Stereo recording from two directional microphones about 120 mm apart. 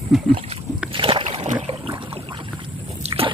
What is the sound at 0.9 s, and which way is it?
Boat, 45° right (ahead or behind).